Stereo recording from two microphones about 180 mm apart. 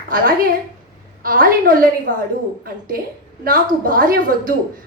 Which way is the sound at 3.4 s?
50° right (ahead or behind).